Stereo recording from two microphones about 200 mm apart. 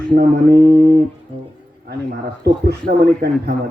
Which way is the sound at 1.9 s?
55° right (ahead or behind).